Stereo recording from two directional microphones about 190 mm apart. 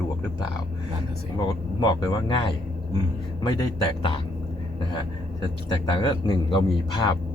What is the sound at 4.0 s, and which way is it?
Speech, 25° left (ahead or behind).